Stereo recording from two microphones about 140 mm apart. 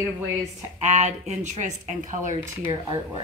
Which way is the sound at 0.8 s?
55° right (ahead or behind).